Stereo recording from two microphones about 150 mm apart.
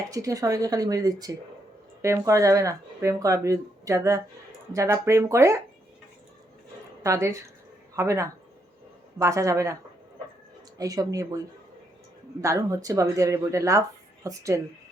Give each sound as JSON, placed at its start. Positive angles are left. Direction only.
{"t": 0.1, "sound": "speech", "side_deg": -20}
{"t": 7.0, "sound": "speech", "side_deg": -20}
{"t": 10.8, "sound": "speech", "side_deg": -25}